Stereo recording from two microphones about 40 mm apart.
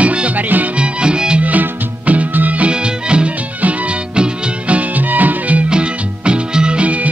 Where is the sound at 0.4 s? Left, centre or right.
Right.